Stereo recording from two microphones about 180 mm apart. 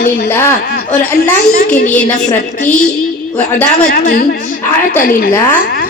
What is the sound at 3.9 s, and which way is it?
A woman's voice, 55° left (ahead or behind).